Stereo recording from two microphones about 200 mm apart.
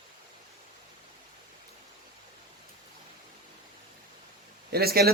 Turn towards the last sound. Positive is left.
turn(degrees=-50)  # may be behind; listen again after turning